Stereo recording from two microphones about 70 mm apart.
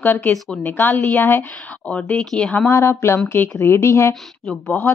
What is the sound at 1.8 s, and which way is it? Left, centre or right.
Speech, left.